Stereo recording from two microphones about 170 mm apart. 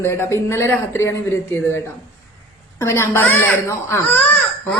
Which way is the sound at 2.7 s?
15° left (ahead or behind).